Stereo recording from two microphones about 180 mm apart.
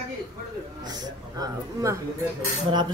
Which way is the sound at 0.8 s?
20° right (ahead or behind).